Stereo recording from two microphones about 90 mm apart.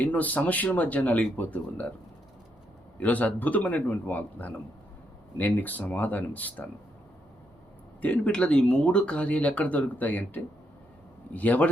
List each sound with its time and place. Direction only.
0.0 s speech: 15° left (ahead or behind)
3.0 s speech: 15° left (ahead or behind)
8.0 s speech: 10° left (ahead or behind)